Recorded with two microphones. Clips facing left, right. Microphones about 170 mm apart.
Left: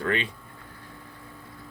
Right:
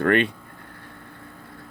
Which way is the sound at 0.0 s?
60° right (ahead or behind).